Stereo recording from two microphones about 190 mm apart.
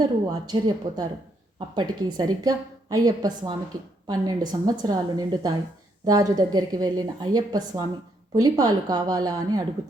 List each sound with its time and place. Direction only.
0.0 s a woman's voice: 20° right (ahead or behind)